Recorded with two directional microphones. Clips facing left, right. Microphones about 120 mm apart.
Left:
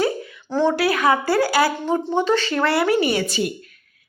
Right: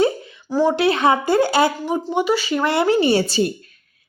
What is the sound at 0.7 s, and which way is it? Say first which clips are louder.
A woman's voice: right 2 dB; 25° right (ahead or behind).